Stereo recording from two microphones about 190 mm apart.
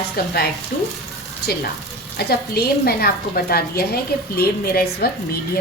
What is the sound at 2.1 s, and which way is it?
A woman's voice, 55° left (ahead or behind).